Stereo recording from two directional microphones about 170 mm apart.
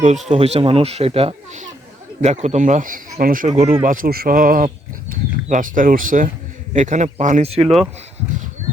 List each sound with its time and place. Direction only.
0.0 s speech: 40° right (ahead or behind)
3.8 s speech: 55° right (ahead or behind); by 7.7 s 35° right (ahead or behind)